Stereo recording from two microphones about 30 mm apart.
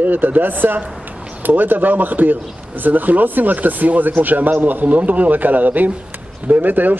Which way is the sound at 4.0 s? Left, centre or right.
Right.